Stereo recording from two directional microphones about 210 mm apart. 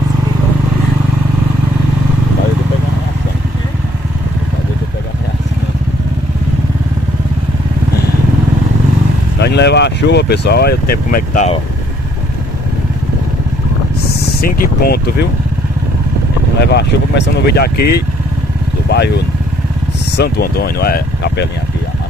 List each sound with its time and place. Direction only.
9.4 s speech: 55° left (ahead or behind)
14.2 s speech: 45° left (ahead or behind)
16.6 s speech: 55° left (ahead or behind)